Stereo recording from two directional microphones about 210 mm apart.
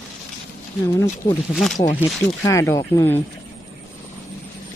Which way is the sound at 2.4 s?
15° left (ahead or behind).